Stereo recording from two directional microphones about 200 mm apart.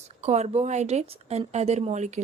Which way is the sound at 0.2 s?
35° right (ahead or behind).